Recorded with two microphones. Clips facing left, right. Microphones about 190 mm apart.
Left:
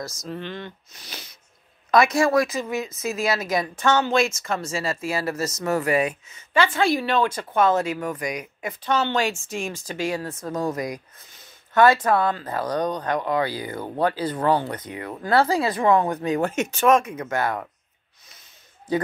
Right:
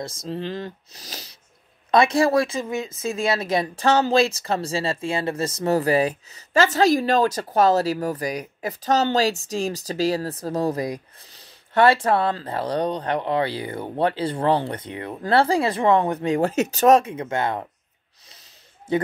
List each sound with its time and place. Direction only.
0.0 s speech: 30° right (ahead or behind)